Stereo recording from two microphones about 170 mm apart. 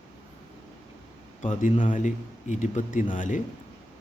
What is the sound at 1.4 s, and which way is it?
Speech, 50° left (ahead or behind).